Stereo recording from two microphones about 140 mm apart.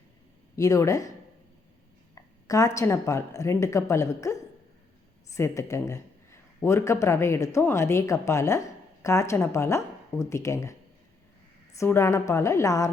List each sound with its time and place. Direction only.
0.5 s a woman's voice: 20° left (ahead or behind)
2.1 s a woman's voice: 25° left (ahead or behind)
11.8 s a woman's voice: 20° left (ahead or behind)